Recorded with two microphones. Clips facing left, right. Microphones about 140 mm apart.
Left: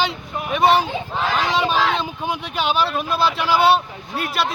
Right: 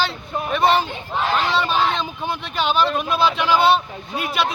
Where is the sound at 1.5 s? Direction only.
15° left (ahead or behind).